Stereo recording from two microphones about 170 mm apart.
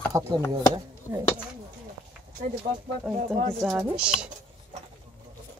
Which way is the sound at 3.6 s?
5° right (ahead or behind).